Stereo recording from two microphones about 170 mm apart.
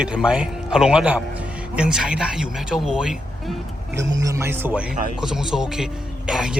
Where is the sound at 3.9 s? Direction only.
20° right (ahead or behind).